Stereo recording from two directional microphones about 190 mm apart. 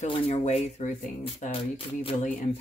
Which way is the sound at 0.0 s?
30° left (ahead or behind).